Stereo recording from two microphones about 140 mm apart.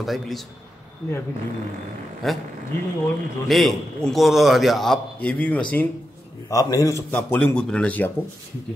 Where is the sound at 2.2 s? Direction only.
Centre (ahead or behind).